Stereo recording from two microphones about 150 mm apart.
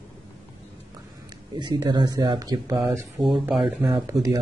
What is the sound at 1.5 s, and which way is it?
Speech, 30° right (ahead or behind).